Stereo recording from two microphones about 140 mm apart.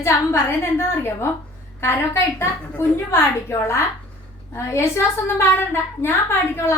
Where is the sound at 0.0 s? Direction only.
20° left (ahead or behind).